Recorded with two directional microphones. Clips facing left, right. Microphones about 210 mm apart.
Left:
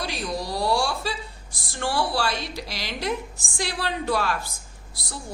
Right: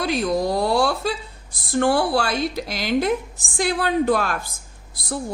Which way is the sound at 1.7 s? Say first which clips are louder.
Right 7 dB; 50° right (ahead or behind).